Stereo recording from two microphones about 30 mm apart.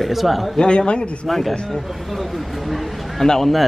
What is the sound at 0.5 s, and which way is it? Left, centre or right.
Speech, left.